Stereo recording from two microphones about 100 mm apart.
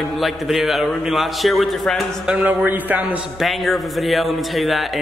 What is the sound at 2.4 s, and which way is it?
Speech, 20° right (ahead or behind).